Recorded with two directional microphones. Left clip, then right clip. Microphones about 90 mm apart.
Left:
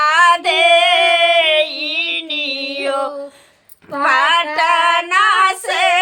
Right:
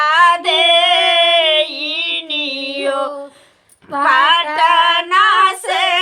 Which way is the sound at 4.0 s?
20° left (ahead or behind).